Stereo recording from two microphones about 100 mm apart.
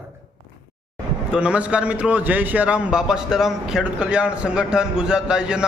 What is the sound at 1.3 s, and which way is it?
A man's voice, 10° right (ahead or behind).